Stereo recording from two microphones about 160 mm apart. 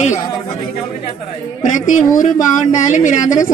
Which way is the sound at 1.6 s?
55° left (ahead or behind).